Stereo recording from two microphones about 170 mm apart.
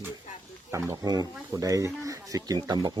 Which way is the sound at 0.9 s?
20° right (ahead or behind).